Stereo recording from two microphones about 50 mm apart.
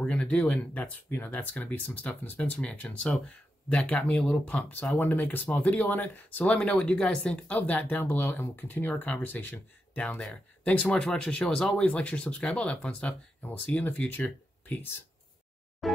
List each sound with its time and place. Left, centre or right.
0.1 s speech: left
4.6 s speech: left
6.5 s speech: left
7.5 s speech: left
9.9 s speech: left
15.8 s a sound: centre